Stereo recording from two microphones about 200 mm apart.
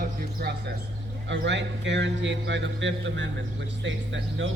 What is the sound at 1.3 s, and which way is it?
A man's voice, 65° right (ahead or behind).